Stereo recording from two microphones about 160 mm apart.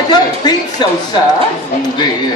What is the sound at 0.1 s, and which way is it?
Speech, 25° left (ahead or behind).